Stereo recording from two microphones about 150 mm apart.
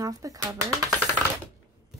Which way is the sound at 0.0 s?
20° right (ahead or behind).